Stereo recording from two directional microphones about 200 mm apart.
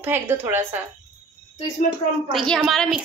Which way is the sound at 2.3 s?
Centre (ahead or behind).